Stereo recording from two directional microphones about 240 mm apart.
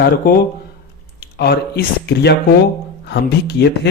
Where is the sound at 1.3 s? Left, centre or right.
Left.